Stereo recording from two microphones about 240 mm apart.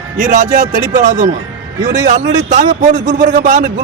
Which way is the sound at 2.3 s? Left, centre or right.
Right.